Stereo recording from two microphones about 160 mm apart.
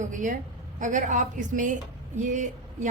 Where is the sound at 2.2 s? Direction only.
50° right (ahead or behind).